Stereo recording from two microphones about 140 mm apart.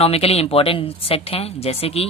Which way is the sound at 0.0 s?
45° left (ahead or behind).